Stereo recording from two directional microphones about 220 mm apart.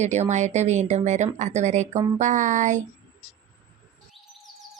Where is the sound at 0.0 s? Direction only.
30° right (ahead or behind).